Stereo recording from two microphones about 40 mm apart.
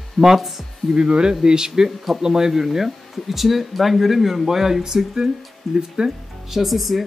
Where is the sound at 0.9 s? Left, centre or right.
Right.